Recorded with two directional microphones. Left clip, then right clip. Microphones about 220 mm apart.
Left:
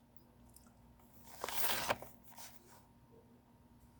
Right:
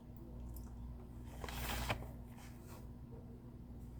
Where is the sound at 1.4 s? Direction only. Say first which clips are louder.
Left 5 dB; 40° left (ahead or behind).